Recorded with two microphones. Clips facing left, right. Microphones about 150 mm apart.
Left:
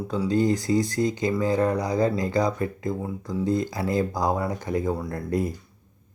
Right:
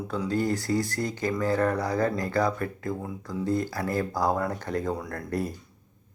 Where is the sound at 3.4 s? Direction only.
15° left (ahead or behind).